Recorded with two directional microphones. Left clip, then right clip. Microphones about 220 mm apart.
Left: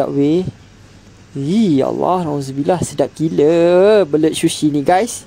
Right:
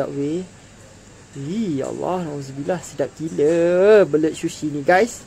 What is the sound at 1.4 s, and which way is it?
Speech, 35° left (ahead or behind).